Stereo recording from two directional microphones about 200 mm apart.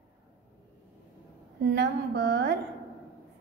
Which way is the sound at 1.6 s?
60° right (ahead or behind).